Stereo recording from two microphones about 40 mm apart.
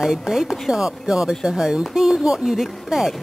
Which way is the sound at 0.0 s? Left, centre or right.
Centre.